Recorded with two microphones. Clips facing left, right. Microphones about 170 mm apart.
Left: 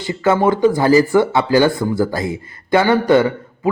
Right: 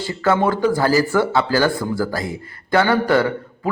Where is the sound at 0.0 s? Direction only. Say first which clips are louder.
Left 3 dB; 20° left (ahead or behind).